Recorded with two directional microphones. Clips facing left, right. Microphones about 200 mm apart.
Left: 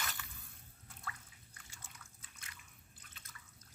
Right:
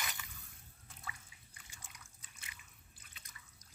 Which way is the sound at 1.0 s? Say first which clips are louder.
Left 2 dB; 15° right (ahead or behind).